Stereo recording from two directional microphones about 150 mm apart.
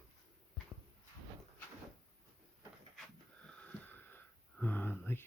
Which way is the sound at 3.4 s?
10° left (ahead or behind).